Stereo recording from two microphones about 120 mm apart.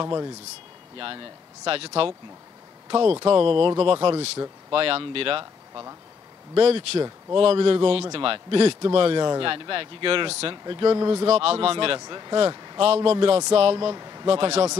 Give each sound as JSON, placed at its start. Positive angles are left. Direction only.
{"t": 0.0, "sound": "speech", "side_deg": -30}
{"t": 3.3, "sound": "speech", "side_deg": -45}
{"t": 5.4, "sound": "speech", "side_deg": -30}
{"t": 6.5, "sound": "a man's voice", "side_deg": -55}
{"t": 10.6, "sound": "speech", "side_deg": -40}
{"t": 11.2, "sound": "speech", "side_deg": -55}
{"t": 12.0, "sound": "a man's voice", "side_deg": -35}
{"t": 12.8, "sound": "a man's voice", "side_deg": -55}
{"t": 13.7, "sound": "a man's voice", "side_deg": -35}
{"t": 14.2, "sound": "speech", "side_deg": -50}